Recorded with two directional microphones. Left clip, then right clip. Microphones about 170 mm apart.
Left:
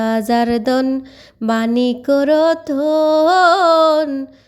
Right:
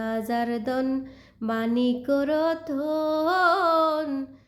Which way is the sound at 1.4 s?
55° left (ahead or behind).